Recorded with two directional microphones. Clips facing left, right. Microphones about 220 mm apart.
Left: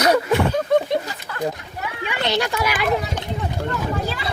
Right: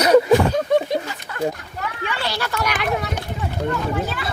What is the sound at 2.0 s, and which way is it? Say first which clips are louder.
Speech: left 5 dB; 20° left (ahead or behind).